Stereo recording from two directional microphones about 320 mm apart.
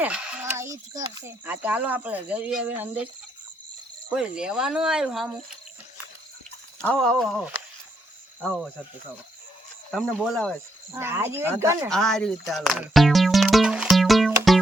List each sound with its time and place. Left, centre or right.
0.0 s speech: centre
4.1 s speech: centre
6.8 s speech: centre
9.9 s speech: centre
10.9 s a sound: centre